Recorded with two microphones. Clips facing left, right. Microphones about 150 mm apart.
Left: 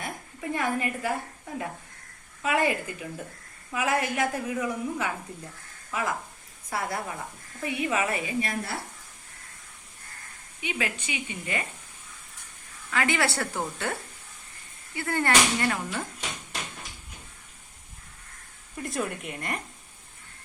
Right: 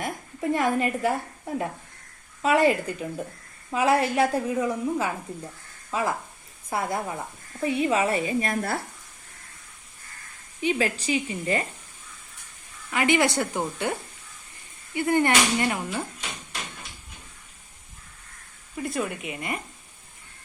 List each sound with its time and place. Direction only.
0.0 s a woman's voice: 35° right (ahead or behind)
2.4 s a woman's voice: 35° right (ahead or behind)
2.6 s a woman's voice: 25° right (ahead or behind); by 8.8 s 50° right (ahead or behind)
10.6 s a woman's voice: 35° right (ahead or behind)
12.9 s a woman's voice: 20° right (ahead or behind)
18.8 s speech: centre (ahead or behind)